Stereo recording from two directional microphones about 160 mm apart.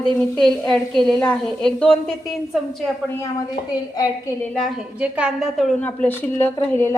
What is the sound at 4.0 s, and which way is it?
Speech, 20° left (ahead or behind).